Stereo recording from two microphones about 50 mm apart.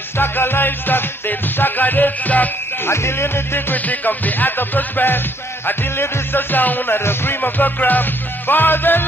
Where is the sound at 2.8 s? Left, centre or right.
Left.